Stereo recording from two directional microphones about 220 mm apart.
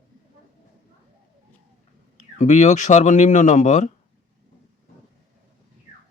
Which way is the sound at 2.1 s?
35° left (ahead or behind).